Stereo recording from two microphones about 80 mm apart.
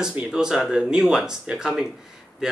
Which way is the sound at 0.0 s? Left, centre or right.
Centre.